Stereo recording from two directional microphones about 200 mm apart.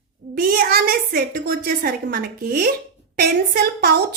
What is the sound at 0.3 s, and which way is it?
Speech, 50° right (ahead or behind).